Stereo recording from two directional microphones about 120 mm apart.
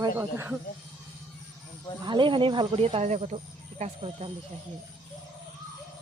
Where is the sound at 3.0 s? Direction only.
75° right (ahead or behind); by 4.3 s 55° right (ahead or behind).